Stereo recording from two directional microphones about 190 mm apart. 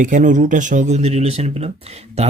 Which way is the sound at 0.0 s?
40° right (ahead or behind).